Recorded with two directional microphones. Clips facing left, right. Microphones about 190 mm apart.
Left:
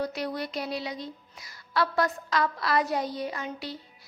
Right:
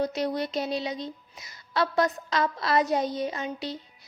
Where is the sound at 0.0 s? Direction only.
20° right (ahead or behind).